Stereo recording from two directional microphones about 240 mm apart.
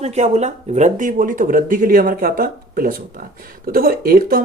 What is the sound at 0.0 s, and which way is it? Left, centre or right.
Speech, right.